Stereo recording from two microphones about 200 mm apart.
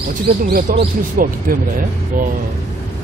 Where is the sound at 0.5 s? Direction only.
45° right (ahead or behind).